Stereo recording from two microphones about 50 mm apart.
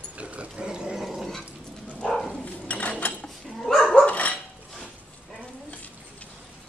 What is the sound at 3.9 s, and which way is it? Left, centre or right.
Dog, left.